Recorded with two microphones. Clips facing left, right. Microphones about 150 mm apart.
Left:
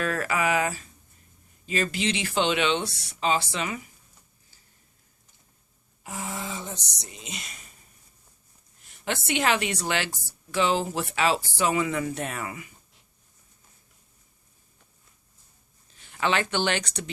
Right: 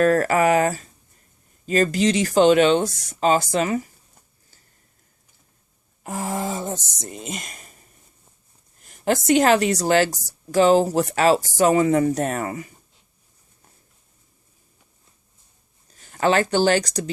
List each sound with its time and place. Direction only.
0.0 s speech: 40° right (ahead or behind)
6.0 s a sound: 50° right (ahead or behind)
8.8 s speech: 45° right (ahead or behind)
15.9 s speech: 40° right (ahead or behind)